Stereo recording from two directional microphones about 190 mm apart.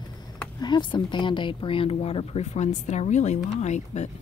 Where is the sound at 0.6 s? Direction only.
25° left (ahead or behind).